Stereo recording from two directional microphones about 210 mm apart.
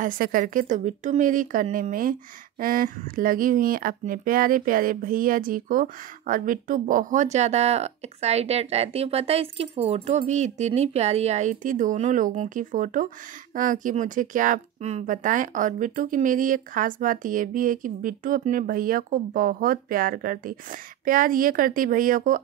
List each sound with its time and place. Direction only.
0.0 s speech: 40° right (ahead or behind)